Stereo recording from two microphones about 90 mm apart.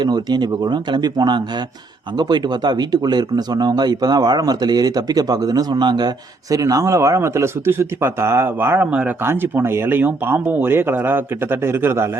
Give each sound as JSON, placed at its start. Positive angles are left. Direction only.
{"t": 0.0, "sound": "speech", "side_deg": -50}